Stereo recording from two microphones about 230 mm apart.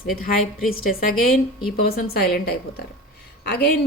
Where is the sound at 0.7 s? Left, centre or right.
Left.